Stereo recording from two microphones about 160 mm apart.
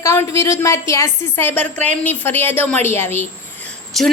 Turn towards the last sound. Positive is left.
turn(degrees=0)  # may be behind; listen again after turning